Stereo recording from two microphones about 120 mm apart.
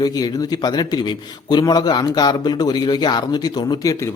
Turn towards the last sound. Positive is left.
turn(degrees=35)  # may be behind; listen again after turning